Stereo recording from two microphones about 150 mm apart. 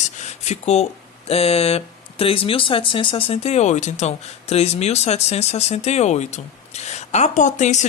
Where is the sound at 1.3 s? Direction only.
40° left (ahead or behind).